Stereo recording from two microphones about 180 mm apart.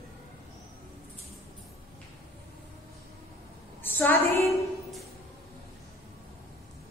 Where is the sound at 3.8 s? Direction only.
10° left (ahead or behind).